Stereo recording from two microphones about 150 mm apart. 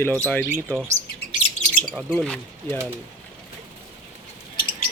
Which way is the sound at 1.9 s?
10° right (ahead or behind).